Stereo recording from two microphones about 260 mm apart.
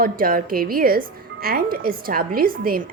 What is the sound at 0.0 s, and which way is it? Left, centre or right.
Speech, right.